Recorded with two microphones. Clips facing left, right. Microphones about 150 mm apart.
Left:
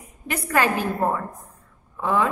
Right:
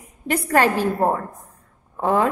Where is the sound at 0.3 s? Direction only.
35° right (ahead or behind).